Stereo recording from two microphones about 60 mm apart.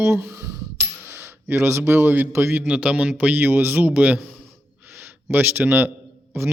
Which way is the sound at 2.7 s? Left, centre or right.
Centre.